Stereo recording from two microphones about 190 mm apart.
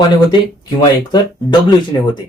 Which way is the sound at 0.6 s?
25° left (ahead or behind).